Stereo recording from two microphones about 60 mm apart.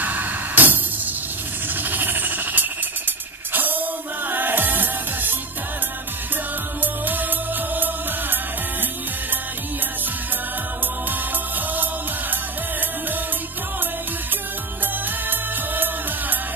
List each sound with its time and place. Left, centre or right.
0.0 s music: right
1.8 s music: right
6.8 s music: right
11.7 s music: right
15.2 s music: right